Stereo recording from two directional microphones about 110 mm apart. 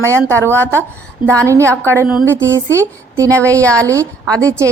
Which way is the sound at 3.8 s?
30° right (ahead or behind).